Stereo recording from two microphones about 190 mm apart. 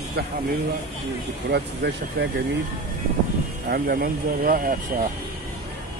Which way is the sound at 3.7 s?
50° right (ahead or behind).